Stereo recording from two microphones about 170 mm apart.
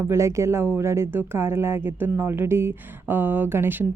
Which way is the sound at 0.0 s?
15° right (ahead or behind).